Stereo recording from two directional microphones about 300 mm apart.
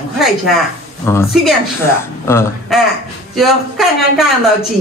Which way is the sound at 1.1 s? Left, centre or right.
Centre.